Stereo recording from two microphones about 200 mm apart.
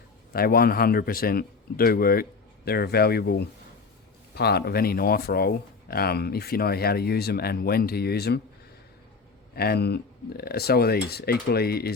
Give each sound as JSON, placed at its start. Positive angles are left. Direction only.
{"t": 0.3, "sound": "speech", "side_deg": 50}
{"t": 9.6, "sound": "speech", "side_deg": 55}